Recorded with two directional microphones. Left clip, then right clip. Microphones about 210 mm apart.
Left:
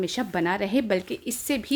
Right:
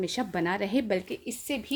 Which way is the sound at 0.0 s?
10° left (ahead or behind).